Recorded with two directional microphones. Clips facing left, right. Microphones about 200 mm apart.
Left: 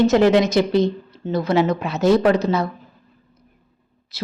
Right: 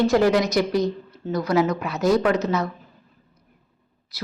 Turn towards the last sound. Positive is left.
turn(degrees=25)  # may be behind; listen again after turning